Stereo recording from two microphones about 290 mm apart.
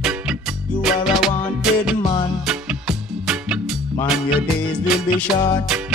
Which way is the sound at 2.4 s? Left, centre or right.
Centre.